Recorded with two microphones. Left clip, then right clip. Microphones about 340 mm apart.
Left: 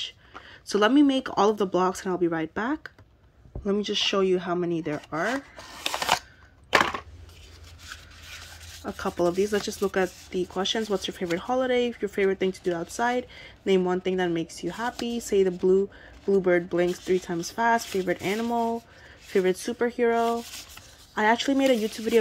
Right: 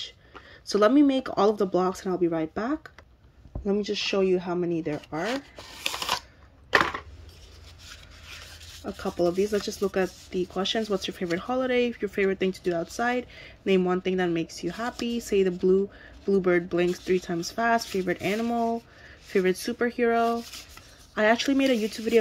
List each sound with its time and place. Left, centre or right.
0.5 s speech: centre
5.9 s camera: centre
6.7 s a sound: left
8.8 s speech: centre